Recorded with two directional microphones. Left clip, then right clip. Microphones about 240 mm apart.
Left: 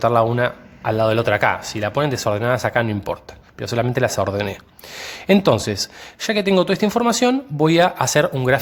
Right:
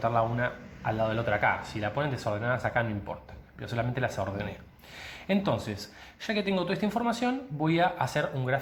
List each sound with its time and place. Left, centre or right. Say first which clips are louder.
0.0 s speech: left 11 dB; left